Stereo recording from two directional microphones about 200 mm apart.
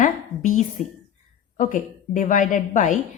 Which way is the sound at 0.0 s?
40° left (ahead or behind).